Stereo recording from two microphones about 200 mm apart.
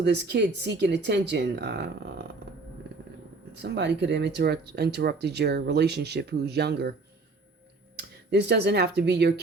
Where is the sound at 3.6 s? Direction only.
60° right (ahead or behind).